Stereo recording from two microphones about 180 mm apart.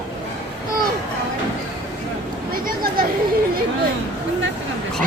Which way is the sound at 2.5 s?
55° right (ahead or behind).